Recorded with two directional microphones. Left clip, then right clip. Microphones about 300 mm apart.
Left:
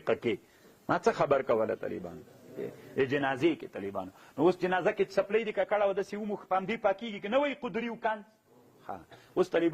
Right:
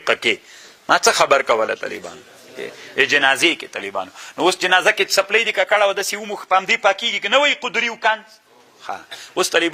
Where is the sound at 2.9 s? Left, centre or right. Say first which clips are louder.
Right 15 dB; centre.